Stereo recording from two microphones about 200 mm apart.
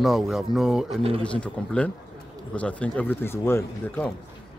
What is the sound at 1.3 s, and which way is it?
A man's voice, 5° left (ahead or behind).